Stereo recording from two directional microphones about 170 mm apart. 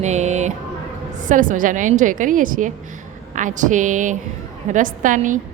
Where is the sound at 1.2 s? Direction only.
50° right (ahead or behind).